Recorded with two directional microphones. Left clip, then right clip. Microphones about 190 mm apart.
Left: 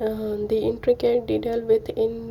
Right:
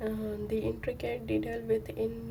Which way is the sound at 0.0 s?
20° left (ahead or behind).